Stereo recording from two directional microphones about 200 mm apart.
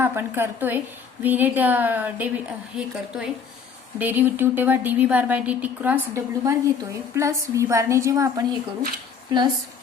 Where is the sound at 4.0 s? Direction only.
10° right (ahead or behind).